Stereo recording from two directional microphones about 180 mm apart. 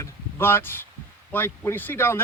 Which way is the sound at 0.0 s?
10° left (ahead or behind).